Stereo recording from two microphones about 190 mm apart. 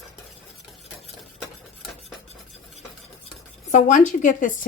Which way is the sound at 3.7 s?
40° left (ahead or behind).